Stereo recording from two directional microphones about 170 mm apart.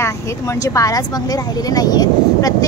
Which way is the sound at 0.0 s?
15° left (ahead or behind).